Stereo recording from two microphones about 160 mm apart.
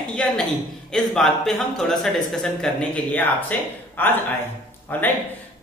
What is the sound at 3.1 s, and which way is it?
Speech, 10° left (ahead or behind).